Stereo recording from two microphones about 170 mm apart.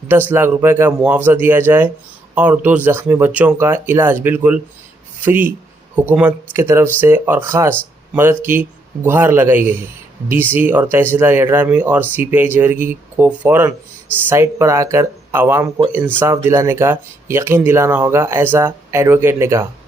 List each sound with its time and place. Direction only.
0.1 s speech: 10° right (ahead or behind)